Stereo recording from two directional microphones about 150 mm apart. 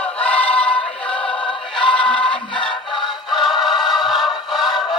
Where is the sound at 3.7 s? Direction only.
30° left (ahead or behind).